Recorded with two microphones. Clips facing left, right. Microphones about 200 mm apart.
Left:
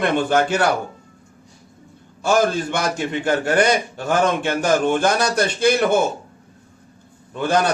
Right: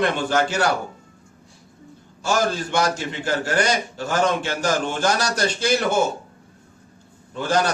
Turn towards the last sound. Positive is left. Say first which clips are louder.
# left 2 dB
turn(degrees=55)  # may be behind; listen again after turning